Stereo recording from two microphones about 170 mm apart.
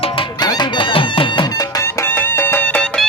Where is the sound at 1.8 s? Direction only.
15° left (ahead or behind).